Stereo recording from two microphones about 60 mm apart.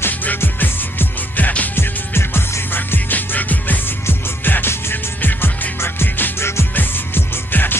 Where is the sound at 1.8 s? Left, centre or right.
Left.